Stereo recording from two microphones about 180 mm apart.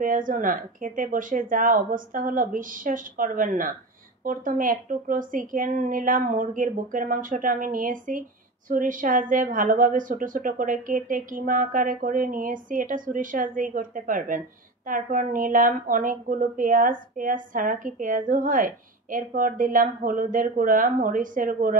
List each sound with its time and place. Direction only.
0.0 s a woman's voice: 50° right (ahead or behind)